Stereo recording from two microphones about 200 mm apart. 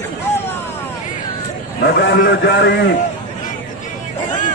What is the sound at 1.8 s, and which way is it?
A man's voice, 50° left (ahead or behind).